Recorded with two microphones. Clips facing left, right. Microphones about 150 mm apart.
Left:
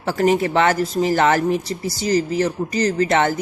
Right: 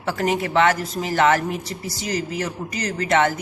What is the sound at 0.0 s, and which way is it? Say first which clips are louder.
A woman's voice: left 5 dB; 35° left (ahead or behind).